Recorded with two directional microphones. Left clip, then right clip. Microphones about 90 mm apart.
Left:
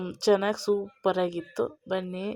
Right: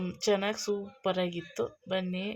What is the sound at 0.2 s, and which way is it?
Speech, 40° left (ahead or behind).